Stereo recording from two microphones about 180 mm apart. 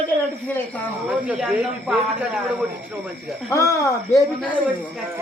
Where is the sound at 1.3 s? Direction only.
5° right (ahead or behind).